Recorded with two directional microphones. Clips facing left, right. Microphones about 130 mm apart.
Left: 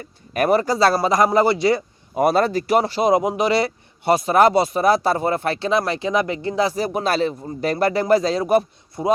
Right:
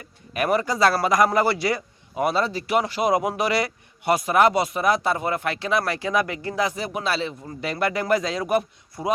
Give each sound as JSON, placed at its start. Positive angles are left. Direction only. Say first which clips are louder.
{"t": 0.3, "sound": "speech", "louder": "left 4 dB", "side_deg": 35}
{"t": 2.1, "sound": "speech", "louder": "left 6 dB", "side_deg": 45}